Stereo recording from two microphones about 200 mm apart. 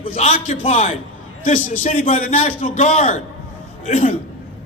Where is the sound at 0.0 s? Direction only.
30° left (ahead or behind).